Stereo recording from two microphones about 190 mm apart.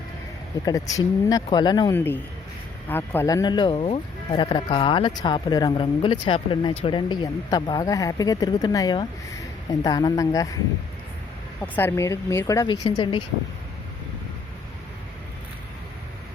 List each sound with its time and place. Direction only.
0.6 s speech: 20° left (ahead or behind)
11.6 s speech: 10° left (ahead or behind); by 13.2 s 25° left (ahead or behind)